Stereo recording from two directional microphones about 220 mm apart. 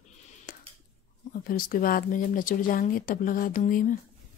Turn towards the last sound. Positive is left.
turn(degrees=35)  # may be behind; listen again after turning